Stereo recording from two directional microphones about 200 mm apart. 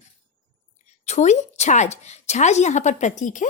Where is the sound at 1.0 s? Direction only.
35° left (ahead or behind).